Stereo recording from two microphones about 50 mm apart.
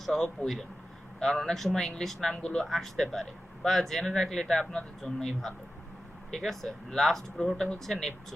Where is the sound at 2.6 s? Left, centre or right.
Centre.